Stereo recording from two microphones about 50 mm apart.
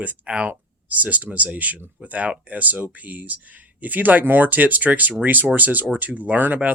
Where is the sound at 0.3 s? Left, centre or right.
Right.